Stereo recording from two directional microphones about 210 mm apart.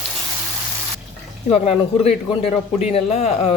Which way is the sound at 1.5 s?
30° left (ahead or behind).